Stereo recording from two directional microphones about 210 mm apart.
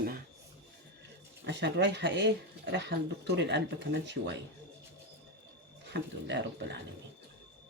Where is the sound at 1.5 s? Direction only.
55° right (ahead or behind).